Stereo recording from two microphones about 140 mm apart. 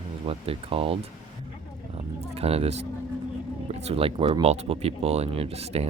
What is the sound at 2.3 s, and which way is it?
Speech, 45° right (ahead or behind).